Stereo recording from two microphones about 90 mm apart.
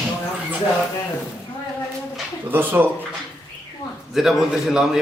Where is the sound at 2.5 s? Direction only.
20° right (ahead or behind).